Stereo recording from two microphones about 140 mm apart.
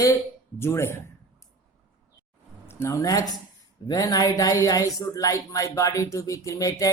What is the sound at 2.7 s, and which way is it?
Speech, 20° left (ahead or behind).